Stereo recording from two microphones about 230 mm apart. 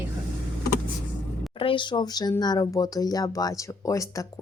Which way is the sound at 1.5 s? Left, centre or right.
Left.